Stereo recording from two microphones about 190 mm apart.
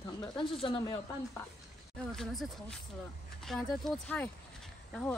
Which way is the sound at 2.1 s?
Centre (ahead or behind).